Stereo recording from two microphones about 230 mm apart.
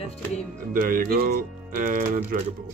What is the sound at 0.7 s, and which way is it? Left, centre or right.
Speech, right.